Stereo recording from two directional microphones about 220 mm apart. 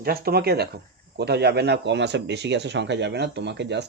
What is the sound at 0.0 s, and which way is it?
Speech, 45° right (ahead or behind).